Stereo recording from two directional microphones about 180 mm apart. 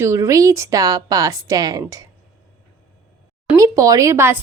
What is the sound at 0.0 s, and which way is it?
A woman's voice, 15° right (ahead or behind).